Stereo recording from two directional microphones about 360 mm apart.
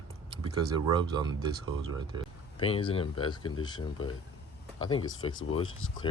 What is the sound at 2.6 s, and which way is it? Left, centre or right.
Speech, centre.